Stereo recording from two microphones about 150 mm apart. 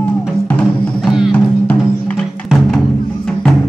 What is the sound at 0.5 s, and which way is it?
Music, 10° left (ahead or behind).